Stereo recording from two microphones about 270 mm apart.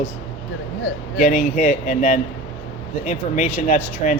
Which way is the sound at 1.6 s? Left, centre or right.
Left.